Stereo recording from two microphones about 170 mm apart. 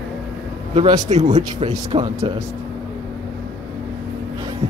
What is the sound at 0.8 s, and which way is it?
Speech, 25° right (ahead or behind).